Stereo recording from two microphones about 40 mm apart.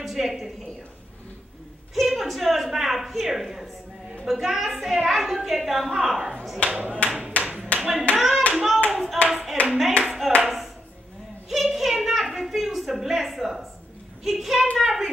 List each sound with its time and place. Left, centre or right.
0.0 s speech: centre
2.0 s a woman's voice: centre
6.6 s speech: right
7.1 s a sound: centre
7.4 s clapping: centre
8.2 s hands: centre
9.3 s clapping: centre
9.7 s speech: centre
10.0 s clapping: centre
11.4 s a sound: centre
14.2 s a woman's voice: centre